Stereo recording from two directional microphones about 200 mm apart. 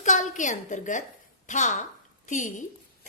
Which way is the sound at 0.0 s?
40° left (ahead or behind).